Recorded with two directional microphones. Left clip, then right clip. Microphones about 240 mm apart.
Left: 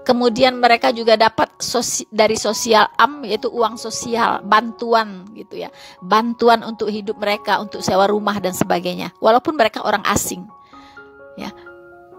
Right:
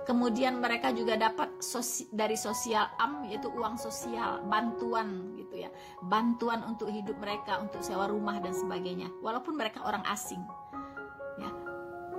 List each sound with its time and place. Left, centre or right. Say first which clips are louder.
0.0 s a woman's voice: left 15 dB; left